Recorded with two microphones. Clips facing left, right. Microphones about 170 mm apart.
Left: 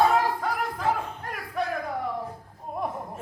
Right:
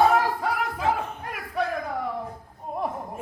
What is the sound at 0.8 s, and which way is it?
Crowd, 10° right (ahead or behind).